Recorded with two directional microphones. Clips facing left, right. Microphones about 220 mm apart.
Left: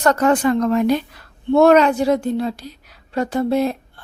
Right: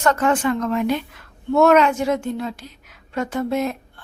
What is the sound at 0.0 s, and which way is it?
A woman's voice, 35° left (ahead or behind).